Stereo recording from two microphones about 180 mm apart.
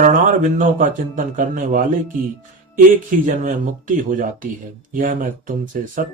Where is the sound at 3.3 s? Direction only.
45° right (ahead or behind).